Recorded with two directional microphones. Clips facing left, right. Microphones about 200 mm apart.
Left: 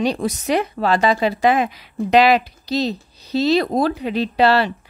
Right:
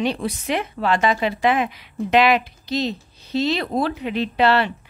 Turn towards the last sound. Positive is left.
turn(degrees=35)  # may be behind; listen again after turning